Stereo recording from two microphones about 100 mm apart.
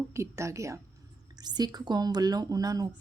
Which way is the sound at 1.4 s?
45° right (ahead or behind).